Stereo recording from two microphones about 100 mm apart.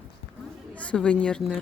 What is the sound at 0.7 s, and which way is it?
Speech, 10° left (ahead or behind).